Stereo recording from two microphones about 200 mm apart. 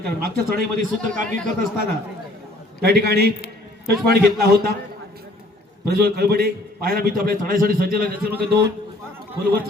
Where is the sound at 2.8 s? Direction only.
50° right (ahead or behind).